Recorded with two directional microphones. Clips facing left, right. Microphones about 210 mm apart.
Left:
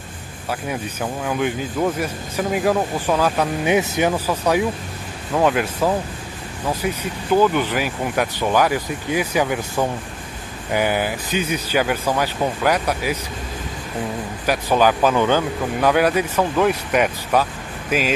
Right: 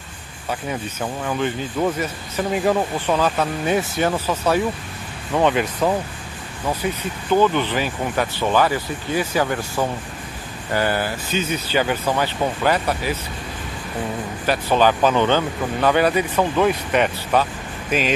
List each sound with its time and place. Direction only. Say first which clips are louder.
1.2 s speech: left 1 dB; 5° left (ahead or behind)
3.7 s speech: left 2 dB; 20° left (ahead or behind)
14.4 s speech: even; 10° left (ahead or behind)